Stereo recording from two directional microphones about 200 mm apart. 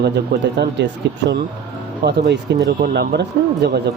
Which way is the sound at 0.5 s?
55° right (ahead or behind).